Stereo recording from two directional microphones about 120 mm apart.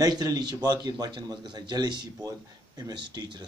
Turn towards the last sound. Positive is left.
turn(degrees=-35)  # may be behind; listen again after turning